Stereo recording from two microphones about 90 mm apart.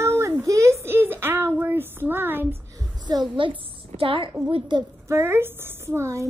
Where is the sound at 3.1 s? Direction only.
50° right (ahead or behind).